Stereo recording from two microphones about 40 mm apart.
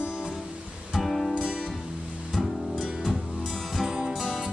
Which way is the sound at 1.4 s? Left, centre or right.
Centre.